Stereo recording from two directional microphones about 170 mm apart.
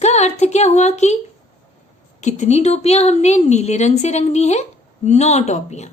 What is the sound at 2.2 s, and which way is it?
A woman's voice, 45° left (ahead or behind).